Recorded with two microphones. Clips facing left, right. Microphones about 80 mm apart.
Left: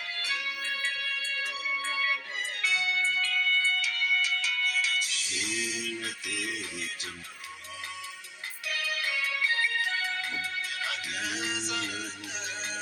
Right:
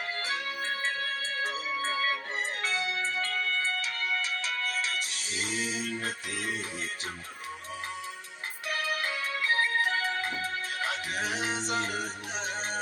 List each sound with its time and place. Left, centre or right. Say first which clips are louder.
0.2 s music: right 2 dB; right
8.6 s music: right 2 dB; right